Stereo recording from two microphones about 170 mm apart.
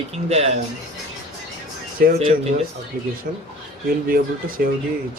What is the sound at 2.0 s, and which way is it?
Speech, 60° right (ahead or behind).